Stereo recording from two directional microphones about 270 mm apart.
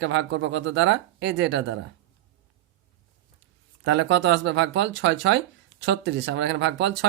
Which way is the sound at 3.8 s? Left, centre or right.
Right.